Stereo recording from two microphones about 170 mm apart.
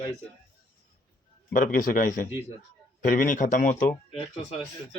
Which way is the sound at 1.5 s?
50° left (ahead or behind).